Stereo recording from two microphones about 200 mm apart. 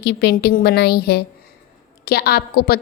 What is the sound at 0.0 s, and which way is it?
A woman's voice, 55° left (ahead or behind).